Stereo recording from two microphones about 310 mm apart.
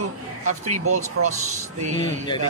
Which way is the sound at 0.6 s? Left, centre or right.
Right.